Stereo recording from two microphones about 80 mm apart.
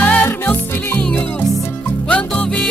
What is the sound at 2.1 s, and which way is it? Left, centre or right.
Music, centre.